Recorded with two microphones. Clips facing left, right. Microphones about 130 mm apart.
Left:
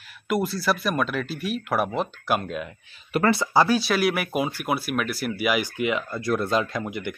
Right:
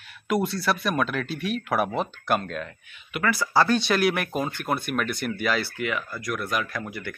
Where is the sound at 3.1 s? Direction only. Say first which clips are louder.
Left 5 dB; 30° left (ahead or behind).